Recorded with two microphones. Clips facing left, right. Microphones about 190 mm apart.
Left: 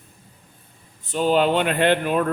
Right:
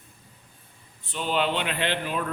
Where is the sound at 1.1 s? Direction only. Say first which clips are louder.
Left 8 dB; 45° left (ahead or behind).